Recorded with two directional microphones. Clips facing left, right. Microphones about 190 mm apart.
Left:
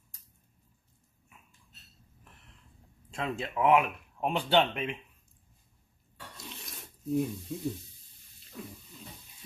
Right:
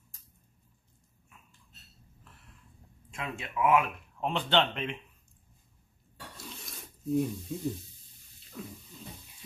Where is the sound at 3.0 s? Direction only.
35° left (ahead or behind).